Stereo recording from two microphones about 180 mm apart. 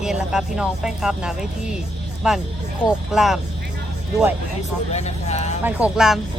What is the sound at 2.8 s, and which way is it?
Speech, centre (ahead or behind).